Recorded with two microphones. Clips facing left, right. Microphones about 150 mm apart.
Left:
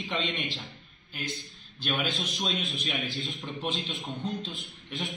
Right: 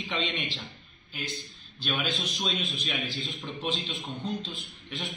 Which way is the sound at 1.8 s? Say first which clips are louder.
Left 1 dB; centre (ahead or behind).